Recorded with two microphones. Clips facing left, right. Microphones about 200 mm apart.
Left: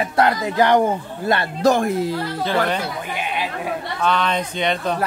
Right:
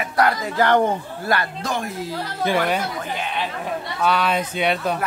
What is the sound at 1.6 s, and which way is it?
Speech, 45° left (ahead or behind).